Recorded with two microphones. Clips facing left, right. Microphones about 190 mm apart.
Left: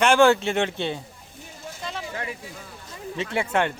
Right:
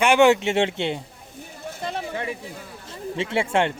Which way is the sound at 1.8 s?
55° right (ahead or behind).